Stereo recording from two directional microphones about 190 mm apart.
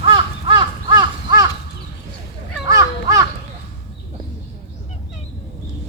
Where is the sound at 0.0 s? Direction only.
25° right (ahead or behind).